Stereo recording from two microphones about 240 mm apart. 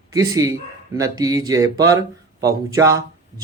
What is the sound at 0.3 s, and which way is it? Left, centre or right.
Speech, centre.